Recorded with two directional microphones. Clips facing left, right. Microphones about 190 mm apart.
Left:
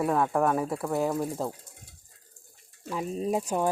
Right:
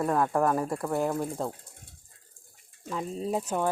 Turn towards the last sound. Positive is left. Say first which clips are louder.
# left 2 dB
turn(degrees=10)  # may be behind; listen again after turning